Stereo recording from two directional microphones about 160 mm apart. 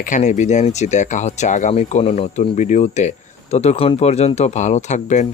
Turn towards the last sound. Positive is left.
turn(degrees=50)  # may be behind; listen again after turning